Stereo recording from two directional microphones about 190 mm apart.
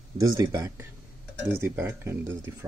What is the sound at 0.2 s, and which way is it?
Speech, 20° right (ahead or behind).